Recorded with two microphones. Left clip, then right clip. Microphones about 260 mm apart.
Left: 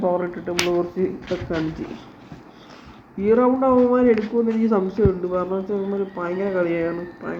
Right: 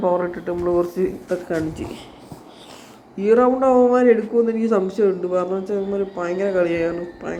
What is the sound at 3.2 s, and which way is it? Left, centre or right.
Speech, centre.